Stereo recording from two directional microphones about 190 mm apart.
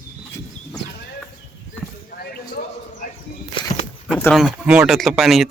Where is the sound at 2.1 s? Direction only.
55° left (ahead or behind).